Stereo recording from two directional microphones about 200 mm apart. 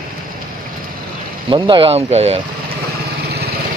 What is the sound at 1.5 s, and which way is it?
Speech, 25° right (ahead or behind).